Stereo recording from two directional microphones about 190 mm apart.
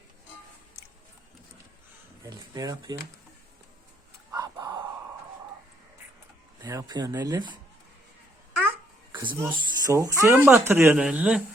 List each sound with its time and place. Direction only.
2.2 s speech: 20° right (ahead or behind)
4.3 s a sound: 15° right (ahead or behind)
6.6 s speech: 15° right (ahead or behind)
9.1 s speech: 20° right (ahead or behind)